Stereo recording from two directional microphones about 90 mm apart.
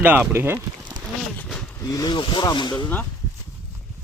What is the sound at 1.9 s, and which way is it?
Speech, 40° left (ahead or behind).